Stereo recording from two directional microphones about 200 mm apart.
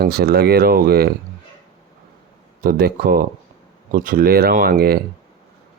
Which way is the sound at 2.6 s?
50° right (ahead or behind).